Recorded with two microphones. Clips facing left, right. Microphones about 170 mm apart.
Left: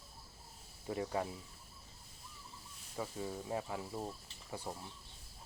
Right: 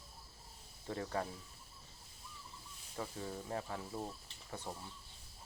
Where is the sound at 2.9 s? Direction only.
10° left (ahead or behind).